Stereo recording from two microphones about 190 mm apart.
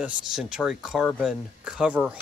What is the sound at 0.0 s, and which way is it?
Speech, 5° right (ahead or behind).